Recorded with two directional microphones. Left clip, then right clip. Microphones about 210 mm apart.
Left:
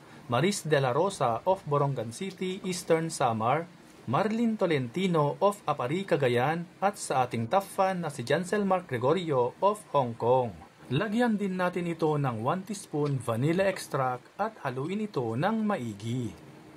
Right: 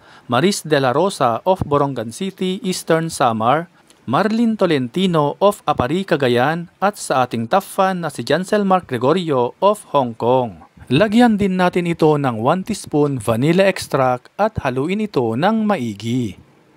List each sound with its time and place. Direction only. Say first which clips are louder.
0.3 s speech: right 10 dB; 45° right (ahead or behind)